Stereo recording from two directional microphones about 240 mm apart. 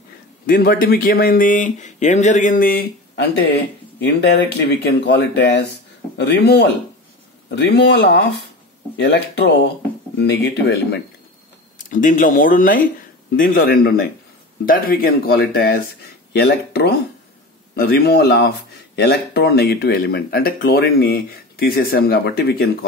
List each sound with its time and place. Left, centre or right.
0.5 s speech: left
11.9 s speech: left